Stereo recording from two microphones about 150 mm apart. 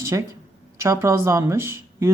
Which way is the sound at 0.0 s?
20° right (ahead or behind).